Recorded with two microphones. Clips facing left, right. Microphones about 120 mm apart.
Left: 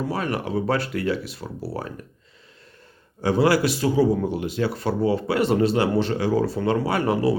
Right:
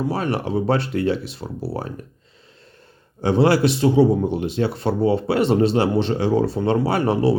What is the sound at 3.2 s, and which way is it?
Speech, 25° right (ahead or behind).